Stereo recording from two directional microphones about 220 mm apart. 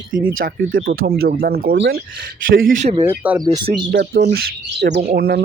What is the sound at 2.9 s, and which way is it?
Speech, 10° right (ahead or behind).